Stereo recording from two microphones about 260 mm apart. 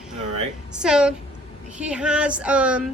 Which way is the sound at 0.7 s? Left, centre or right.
Centre.